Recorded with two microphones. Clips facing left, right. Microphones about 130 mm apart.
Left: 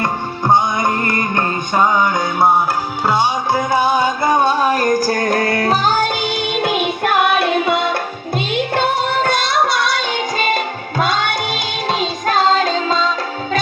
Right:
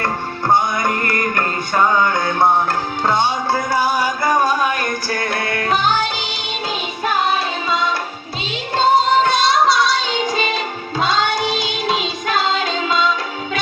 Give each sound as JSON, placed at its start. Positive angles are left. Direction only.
{"t": 0.0, "sound": "music", "side_deg": 15}
{"t": 3.7, "sound": "music", "side_deg": 20}